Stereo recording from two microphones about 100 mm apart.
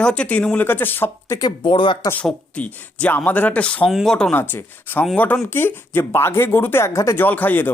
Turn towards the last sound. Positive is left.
turn(degrees=20)  # may be behind; listen again after turning